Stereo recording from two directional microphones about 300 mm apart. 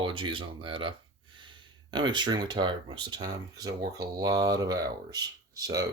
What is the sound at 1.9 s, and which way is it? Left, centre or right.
Speech, centre.